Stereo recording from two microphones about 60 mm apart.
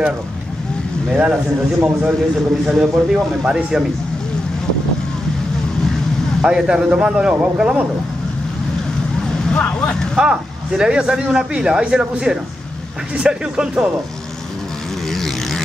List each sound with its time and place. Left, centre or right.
1.1 s speech: centre
2.8 s speech: centre
6.4 s speech: centre
9.6 s vehicle: left
10.1 s speech: centre
15.0 s vehicle: centre